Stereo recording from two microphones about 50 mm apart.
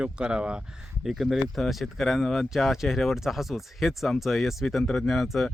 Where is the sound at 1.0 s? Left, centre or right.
Centre.